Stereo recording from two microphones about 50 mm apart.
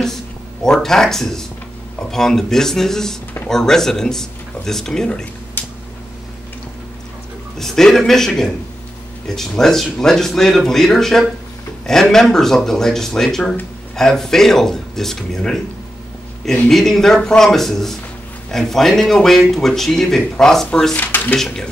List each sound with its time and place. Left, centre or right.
0.7 s speech: centre
7.5 s a man's voice: centre
9.3 s speech: centre
16.6 s speech: centre
20.9 s speech: left